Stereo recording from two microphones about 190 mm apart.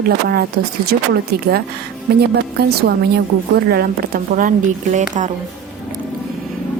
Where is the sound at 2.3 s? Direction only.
55° right (ahead or behind).